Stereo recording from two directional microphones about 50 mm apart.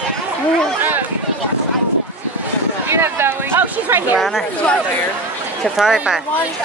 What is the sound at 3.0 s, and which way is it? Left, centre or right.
Chatter, right.